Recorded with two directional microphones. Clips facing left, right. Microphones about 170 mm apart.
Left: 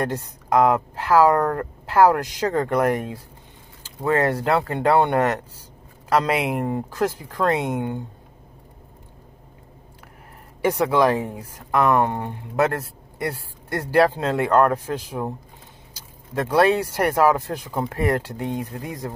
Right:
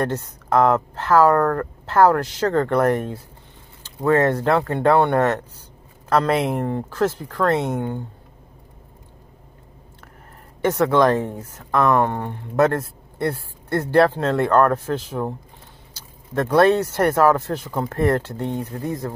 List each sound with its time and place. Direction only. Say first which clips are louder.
0.0 s speech: right 2 dB; 15° left (ahead or behind)
10.6 s speech: right 2 dB; 10° left (ahead or behind)